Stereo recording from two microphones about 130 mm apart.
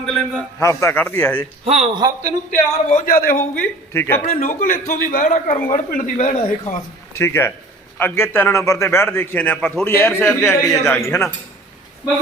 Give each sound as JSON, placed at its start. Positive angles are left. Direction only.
{"t": 0.0, "sound": "a man's voice", "side_deg": 5}
{"t": 0.6, "sound": "a man's voice", "side_deg": 20}
{"t": 2.5, "sound": "a man's voice", "side_deg": 90}
{"t": 3.6, "sound": "a man's voice", "side_deg": 15}
{"t": 4.2, "sound": "a man's voice", "side_deg": 85}
{"t": 6.3, "sound": "speech", "side_deg": 50}
{"t": 7.2, "sound": "a man's voice", "side_deg": 20}